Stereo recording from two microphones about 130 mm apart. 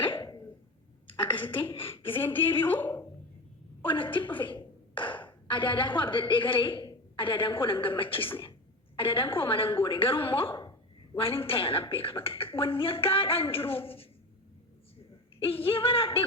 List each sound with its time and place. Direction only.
0.2 s a sound: 30° left (ahead or behind)
1.1 s a woman's voice: 40° left (ahead or behind)
2.6 s speech: 15° left (ahead or behind)
3.8 s a woman's voice: 40° left (ahead or behind)
15.4 s a woman's voice: 45° left (ahead or behind)